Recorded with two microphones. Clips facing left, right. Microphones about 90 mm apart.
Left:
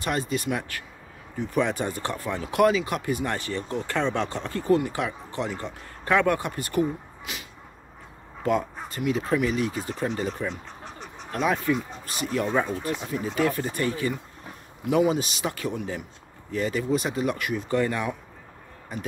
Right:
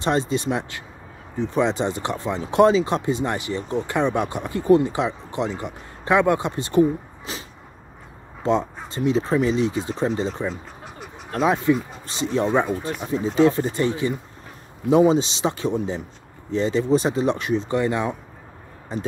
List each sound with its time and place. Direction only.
0.0 s speech: 25° right (ahead or behind)
10.5 s duck: 5° right (ahead or behind)
11.4 s speech: 20° right (ahead or behind)